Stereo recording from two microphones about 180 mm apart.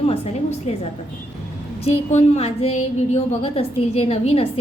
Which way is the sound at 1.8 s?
40° left (ahead or behind).